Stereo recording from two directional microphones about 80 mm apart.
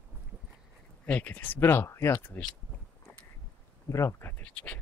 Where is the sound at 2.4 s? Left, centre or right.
Centre.